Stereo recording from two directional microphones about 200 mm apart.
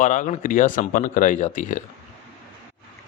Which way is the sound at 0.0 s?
40° left (ahead or behind).